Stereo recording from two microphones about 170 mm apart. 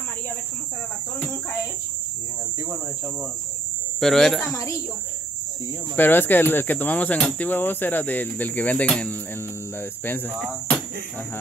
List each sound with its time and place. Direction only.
4.0 s speech: centre (ahead or behind)
4.4 s a woman's voice: 20° left (ahead or behind)
5.9 s speech: 10° left (ahead or behind)
10.3 s speech: centre (ahead or behind)